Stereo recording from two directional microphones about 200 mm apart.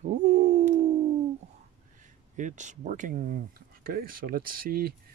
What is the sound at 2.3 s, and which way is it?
Speech, 40° right (ahead or behind).